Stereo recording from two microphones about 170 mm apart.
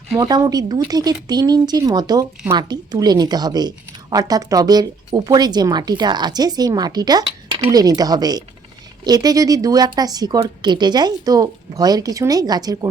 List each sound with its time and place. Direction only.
0.2 s a woman's voice: 25° right (ahead or behind)